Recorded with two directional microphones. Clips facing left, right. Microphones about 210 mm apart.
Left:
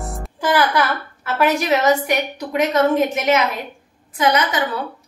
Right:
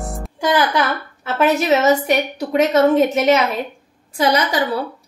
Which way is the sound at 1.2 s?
25° right (ahead or behind).